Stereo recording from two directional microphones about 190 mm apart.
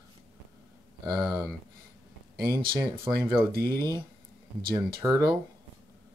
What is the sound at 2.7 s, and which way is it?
Speech, 25° right (ahead or behind).